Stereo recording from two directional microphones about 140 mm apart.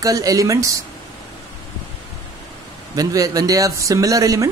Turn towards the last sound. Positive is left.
turn(degrees=-25)  # may be behind; listen again after turning